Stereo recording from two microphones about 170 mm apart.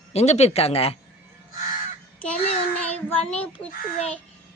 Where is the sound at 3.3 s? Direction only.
10° left (ahead or behind).